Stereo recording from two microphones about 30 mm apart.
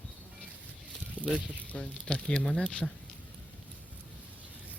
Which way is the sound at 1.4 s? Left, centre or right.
Left.